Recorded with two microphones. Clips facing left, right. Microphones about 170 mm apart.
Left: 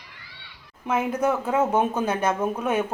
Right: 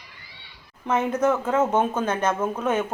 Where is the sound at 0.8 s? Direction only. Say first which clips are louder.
Right 2 dB; 10° left (ahead or behind).